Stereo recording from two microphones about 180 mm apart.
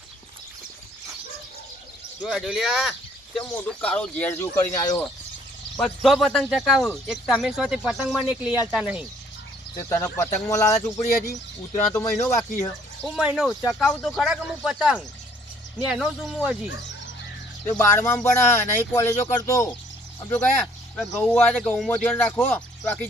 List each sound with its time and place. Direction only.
2.2 s speech: centre (ahead or behind); by 5.0 s 15° left (ahead or behind)
5.7 s speech: centre (ahead or behind)
9.9 s speech: 15° left (ahead or behind)
11.9 s speech: 15° left (ahead or behind)
13.1 s speech: centre (ahead or behind)
17.7 s speech: 10° left (ahead or behind)